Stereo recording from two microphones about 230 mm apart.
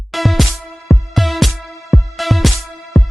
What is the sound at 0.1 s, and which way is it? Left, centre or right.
Music, centre.